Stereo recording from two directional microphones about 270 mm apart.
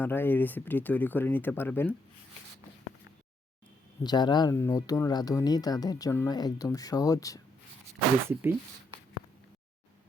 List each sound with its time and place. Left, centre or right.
0.0 s speech: centre
4.0 s speech: centre
8.3 s speech: centre